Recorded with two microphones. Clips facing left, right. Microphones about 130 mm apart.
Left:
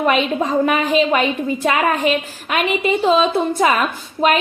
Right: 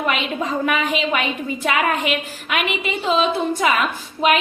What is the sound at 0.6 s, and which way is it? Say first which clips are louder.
A woman's voice: left 5 dB; 35° left (ahead or behind).